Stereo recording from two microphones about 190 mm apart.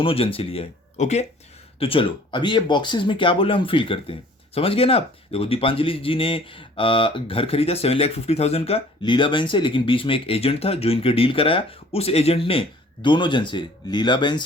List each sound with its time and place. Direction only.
0.0 s speech: 30° left (ahead or behind)